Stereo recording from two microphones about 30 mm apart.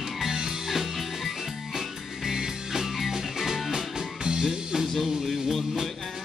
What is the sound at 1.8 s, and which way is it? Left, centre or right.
Music, centre.